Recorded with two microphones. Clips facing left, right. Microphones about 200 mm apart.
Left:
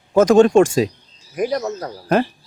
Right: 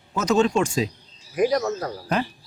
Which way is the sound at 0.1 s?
50° left (ahead or behind).